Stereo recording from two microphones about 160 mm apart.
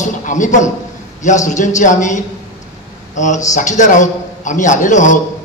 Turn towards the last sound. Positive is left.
turn(degrees=50)  # may be behind; listen again after turning